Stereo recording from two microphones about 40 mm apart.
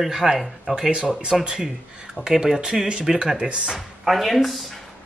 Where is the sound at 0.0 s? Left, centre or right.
Centre.